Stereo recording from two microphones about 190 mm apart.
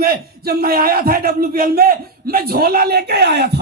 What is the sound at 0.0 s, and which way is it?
Speech, 50° right (ahead or behind).